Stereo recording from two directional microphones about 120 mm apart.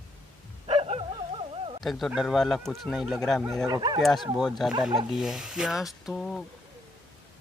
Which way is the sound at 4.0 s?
Centre (ahead or behind).